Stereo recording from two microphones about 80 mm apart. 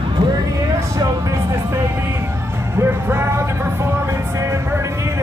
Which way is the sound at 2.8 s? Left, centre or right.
Right.